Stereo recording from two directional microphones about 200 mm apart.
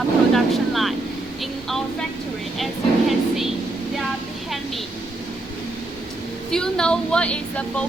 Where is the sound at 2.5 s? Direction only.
Centre (ahead or behind).